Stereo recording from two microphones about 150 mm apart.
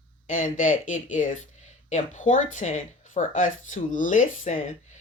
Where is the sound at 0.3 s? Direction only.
60° left (ahead or behind).